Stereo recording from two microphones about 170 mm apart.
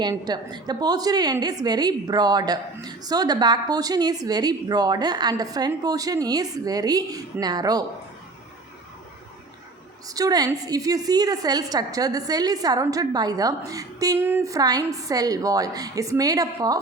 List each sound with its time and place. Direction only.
0.0 s a woman's voice: 25° right (ahead or behind)
10.1 s a woman's voice: 20° right (ahead or behind)